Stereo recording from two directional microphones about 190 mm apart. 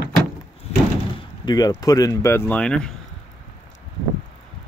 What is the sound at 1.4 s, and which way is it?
Speech, 20° left (ahead or behind).